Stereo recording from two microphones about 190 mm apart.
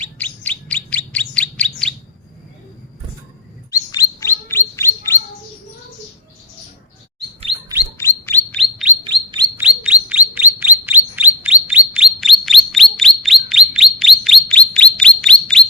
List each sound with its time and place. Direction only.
0.0 s bird: 5° left (ahead or behind)
3.7 s bird: 15° left (ahead or behind)
7.9 s bird: 10° left (ahead or behind)
9.0 s chirp: 25° right (ahead or behind)
9.6 s chirp: 5° right (ahead or behind)